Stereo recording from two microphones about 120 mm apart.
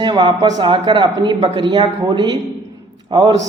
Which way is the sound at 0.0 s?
40° right (ahead or behind).